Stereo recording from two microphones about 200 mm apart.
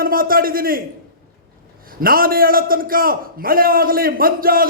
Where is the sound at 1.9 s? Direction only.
45° right (ahead or behind).